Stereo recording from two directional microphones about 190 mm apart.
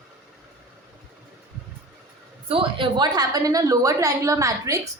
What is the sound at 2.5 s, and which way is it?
A woman's voice, 25° right (ahead or behind).